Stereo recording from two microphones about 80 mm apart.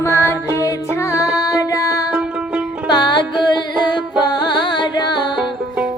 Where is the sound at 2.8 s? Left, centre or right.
Left.